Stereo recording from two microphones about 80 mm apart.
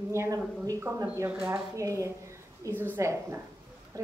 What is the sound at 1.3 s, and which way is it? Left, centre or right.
Speech, centre.